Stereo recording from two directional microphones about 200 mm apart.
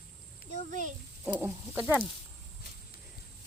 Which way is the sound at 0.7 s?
40° right (ahead or behind).